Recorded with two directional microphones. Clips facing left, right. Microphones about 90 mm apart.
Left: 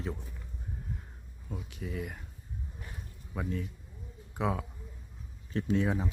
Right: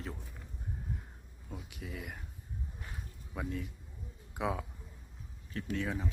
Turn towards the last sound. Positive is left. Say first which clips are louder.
# left 6 dB
turn(degrees=20)  # may be behind; listen again after turning